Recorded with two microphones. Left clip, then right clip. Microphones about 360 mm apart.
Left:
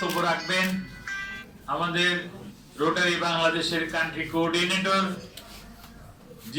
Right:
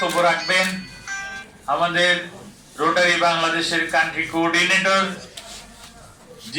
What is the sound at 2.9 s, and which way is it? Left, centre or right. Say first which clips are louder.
Speech: right 8 dB; centre.